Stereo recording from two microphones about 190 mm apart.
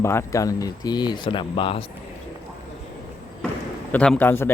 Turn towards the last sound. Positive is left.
turn(degrees=10)  # may be behind; listen again after turning